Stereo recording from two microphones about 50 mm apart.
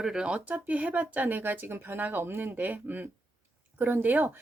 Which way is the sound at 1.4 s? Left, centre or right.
Right.